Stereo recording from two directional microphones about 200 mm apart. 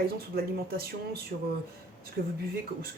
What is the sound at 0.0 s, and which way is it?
Speech, 50° right (ahead or behind).